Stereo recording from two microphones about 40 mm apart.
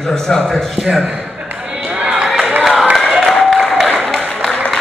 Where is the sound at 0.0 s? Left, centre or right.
Centre.